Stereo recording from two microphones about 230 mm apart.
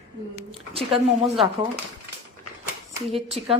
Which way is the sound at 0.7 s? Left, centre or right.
Right.